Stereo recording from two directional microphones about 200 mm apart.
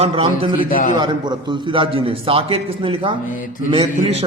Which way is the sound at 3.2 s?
40° left (ahead or behind).